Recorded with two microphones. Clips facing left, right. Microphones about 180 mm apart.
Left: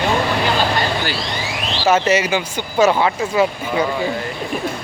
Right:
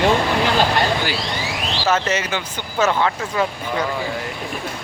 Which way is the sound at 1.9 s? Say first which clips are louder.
Left 6 dB; 10° left (ahead or behind).